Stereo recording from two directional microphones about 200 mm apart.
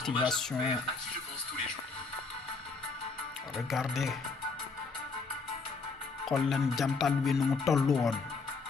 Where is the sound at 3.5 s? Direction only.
Centre (ahead or behind).